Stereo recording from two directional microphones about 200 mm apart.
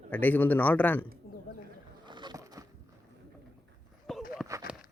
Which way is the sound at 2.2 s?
20° right (ahead or behind).